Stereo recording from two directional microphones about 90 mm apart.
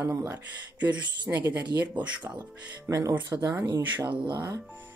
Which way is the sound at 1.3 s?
20° right (ahead or behind).